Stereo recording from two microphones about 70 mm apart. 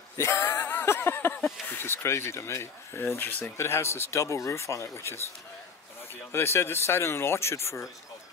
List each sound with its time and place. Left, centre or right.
0.2 s a sound: left
1.4 s speech: left
3.5 s speech: left
6.3 s speech: left